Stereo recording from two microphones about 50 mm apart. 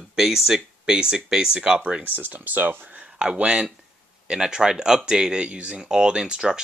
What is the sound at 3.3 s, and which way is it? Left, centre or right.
Speech, centre.